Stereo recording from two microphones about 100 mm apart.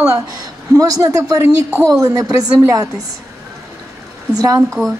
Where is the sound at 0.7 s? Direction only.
35° right (ahead or behind).